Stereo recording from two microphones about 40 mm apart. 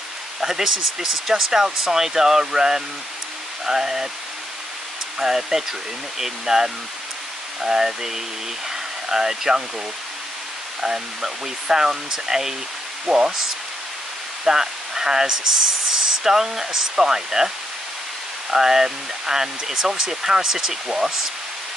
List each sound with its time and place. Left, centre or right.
0.4 s speech: centre
5.2 s speech: centre
8.6 s a sound: centre
10.8 s speech: centre
13.0 s speech: right
14.4 s speech: centre
18.5 s speech: centre